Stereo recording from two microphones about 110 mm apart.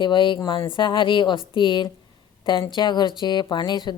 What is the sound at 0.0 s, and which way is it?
Speech, 45° left (ahead or behind).